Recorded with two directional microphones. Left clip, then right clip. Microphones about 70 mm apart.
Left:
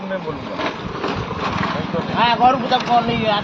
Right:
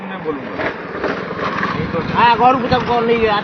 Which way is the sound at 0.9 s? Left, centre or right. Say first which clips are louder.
Right 3 dB; right.